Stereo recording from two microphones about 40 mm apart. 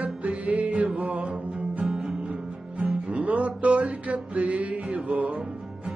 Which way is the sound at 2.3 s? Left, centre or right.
Right.